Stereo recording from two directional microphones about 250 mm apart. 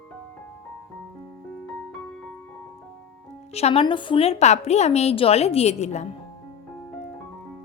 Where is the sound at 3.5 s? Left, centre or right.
Left.